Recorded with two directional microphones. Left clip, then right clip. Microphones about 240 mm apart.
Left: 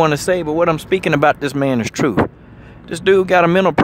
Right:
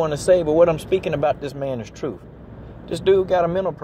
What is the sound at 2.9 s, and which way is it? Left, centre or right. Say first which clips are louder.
Speech: left 4 dB; centre.